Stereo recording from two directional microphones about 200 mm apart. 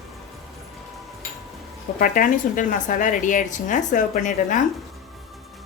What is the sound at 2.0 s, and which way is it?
Speech, 40° left (ahead or behind).